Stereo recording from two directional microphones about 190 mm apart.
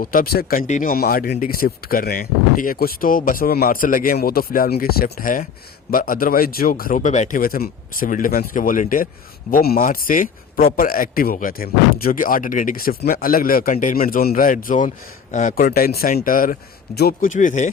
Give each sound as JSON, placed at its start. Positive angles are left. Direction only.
{"t": 0.0, "sound": "a man's voice", "side_deg": 50}